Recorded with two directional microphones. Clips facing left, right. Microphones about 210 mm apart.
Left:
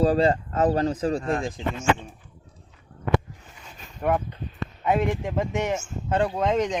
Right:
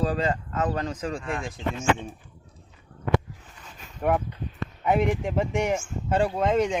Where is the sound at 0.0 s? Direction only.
35° left (ahead or behind).